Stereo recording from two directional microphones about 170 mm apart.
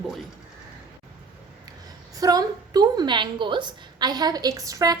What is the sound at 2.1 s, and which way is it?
A woman's voice, 20° right (ahead or behind).